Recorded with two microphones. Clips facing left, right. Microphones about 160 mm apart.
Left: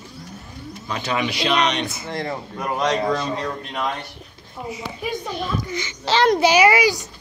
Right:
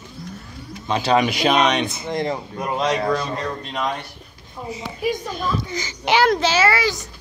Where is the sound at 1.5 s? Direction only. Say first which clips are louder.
Right 2 dB; 20° right (ahead or behind).